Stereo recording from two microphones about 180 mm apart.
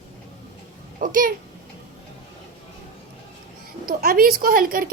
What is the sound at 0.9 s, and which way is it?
Speech, 50° right (ahead or behind).